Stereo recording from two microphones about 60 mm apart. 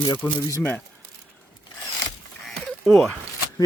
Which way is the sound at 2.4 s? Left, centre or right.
Centre.